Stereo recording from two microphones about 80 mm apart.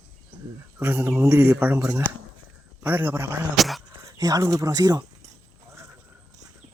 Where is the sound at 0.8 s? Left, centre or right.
Right.